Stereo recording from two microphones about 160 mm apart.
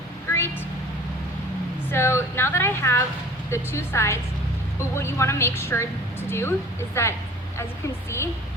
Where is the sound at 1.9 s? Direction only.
15° left (ahead or behind).